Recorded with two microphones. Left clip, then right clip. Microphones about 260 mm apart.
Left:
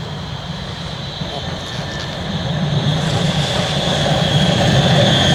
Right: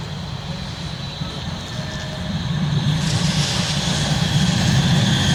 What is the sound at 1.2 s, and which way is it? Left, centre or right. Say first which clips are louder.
Vehicle: left 5 dB; centre.